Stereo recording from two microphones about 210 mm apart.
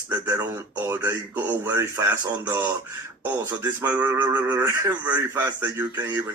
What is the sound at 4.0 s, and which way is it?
Speech, 5° right (ahead or behind).